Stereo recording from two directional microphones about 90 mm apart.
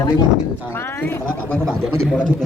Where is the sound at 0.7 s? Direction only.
25° left (ahead or behind).